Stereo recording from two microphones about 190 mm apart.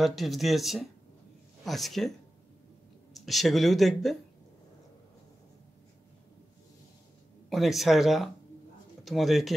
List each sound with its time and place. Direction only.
0.0 s speech: centre (ahead or behind)
7.4 s speech: centre (ahead or behind)